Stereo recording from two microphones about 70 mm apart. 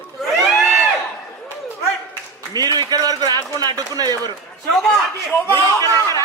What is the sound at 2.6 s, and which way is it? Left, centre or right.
Speech, right.